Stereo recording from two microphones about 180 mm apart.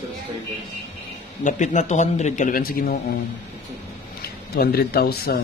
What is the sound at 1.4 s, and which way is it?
A man's voice, 45° left (ahead or behind).